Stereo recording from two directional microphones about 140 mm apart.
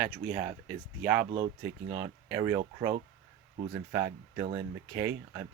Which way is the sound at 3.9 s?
20° right (ahead or behind).